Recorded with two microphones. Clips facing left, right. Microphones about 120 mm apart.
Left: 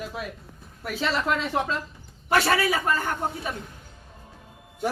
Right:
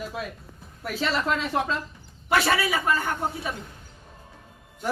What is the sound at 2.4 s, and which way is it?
Speech, 5° right (ahead or behind).